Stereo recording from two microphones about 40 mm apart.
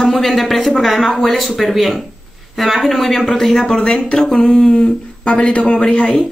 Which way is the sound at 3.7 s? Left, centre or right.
Left.